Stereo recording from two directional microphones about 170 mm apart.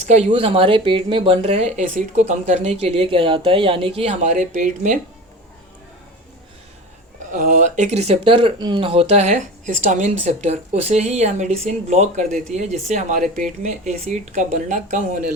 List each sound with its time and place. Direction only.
0.0 s speech: 40° right (ahead or behind)
7.3 s speech: 45° right (ahead or behind)